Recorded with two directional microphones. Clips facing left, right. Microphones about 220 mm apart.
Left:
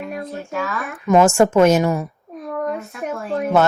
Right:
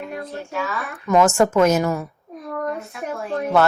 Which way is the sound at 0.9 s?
20° left (ahead or behind).